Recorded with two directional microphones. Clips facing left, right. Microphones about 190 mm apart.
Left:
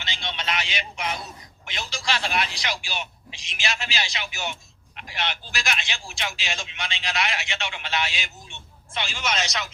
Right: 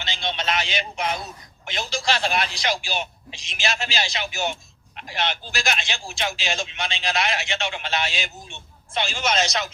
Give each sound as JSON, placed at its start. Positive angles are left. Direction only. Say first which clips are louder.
{"t": 0.0, "sound": "speech", "louder": "right 4 dB", "side_deg": -35}